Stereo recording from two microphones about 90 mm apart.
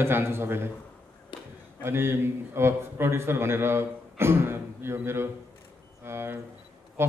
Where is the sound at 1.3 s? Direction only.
65° left (ahead or behind).